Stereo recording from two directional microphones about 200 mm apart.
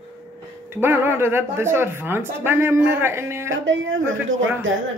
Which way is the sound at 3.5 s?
75° right (ahead or behind).